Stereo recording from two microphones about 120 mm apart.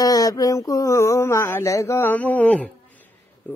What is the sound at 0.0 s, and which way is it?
Mantra, 30° left (ahead or behind).